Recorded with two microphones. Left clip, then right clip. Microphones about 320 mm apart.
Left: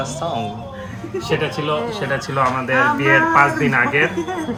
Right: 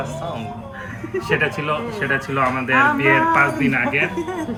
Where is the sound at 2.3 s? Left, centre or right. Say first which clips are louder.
Left 1 dB; centre.